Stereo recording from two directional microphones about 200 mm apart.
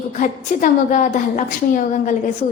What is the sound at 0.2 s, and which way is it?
A woman's voice, 40° left (ahead or behind).